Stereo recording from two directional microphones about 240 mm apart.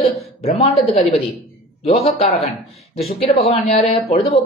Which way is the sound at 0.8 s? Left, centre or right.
Left.